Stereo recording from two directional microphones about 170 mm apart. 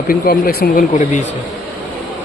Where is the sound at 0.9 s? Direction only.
45° left (ahead or behind).